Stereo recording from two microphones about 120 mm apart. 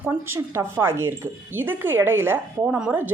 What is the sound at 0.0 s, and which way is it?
Speech, 20° right (ahead or behind).